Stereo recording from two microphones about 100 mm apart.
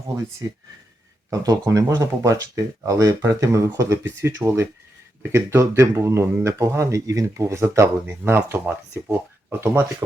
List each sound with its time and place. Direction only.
1.3 s speech: 35° right (ahead or behind)